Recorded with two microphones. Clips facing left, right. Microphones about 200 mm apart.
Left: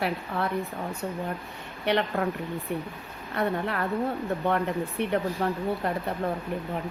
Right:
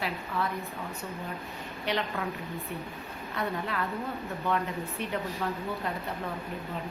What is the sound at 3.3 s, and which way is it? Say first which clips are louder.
Speech: left 5 dB; 55° left (ahead or behind).